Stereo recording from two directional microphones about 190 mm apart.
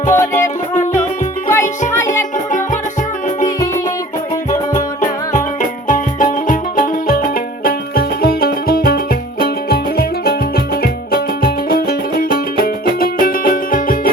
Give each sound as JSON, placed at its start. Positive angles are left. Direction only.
{"t": 0.1, "sound": "music", "side_deg": 15}
{"t": 4.7, "sound": "music", "side_deg": 40}